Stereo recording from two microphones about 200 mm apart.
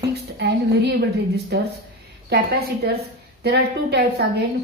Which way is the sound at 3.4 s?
55° right (ahead or behind).